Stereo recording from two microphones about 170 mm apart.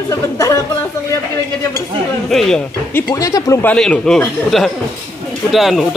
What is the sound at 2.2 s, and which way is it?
Speech, centre (ahead or behind).